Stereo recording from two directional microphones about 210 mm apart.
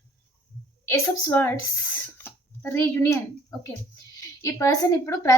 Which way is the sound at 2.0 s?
10° left (ahead or behind).